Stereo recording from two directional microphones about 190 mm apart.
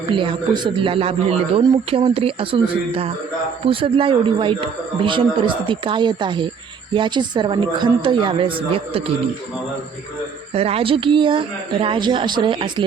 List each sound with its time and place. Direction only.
0.1 s a man's voice: 25° right (ahead or behind)
10.5 s a man's voice: 30° right (ahead or behind)